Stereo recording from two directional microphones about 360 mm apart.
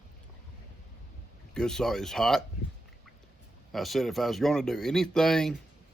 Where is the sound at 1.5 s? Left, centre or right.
Centre.